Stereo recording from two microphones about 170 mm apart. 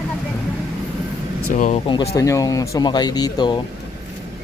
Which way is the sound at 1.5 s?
50° left (ahead or behind).